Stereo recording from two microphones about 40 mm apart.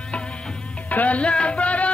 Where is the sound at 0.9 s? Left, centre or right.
Left.